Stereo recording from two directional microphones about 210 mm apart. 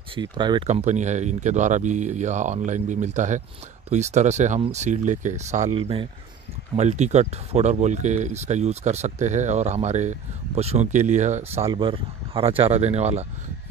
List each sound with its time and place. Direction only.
0.1 s speech: 20° right (ahead or behind)
0.7 s speech: 35° right (ahead or behind)